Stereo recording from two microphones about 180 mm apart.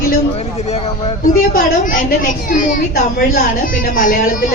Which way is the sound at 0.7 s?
35° left (ahead or behind).